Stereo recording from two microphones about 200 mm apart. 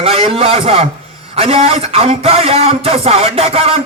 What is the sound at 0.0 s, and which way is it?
Speech, 30° right (ahead or behind).